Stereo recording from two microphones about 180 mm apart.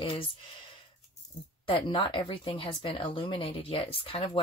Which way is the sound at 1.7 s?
30° left (ahead or behind).